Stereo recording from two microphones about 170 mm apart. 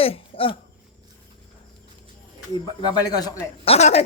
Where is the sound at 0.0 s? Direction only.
35° left (ahead or behind).